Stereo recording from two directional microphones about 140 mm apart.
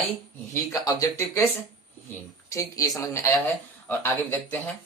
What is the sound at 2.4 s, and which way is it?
Speech, 25° left (ahead or behind).